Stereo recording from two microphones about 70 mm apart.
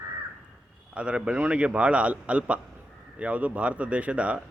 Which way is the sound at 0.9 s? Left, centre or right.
Centre.